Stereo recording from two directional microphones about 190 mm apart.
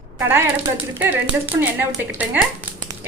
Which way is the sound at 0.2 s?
15° right (ahead or behind).